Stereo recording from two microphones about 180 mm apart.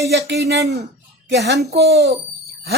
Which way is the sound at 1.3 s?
65° right (ahead or behind).